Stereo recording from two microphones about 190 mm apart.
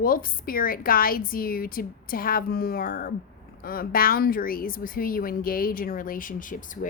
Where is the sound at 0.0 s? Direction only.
50° left (ahead or behind).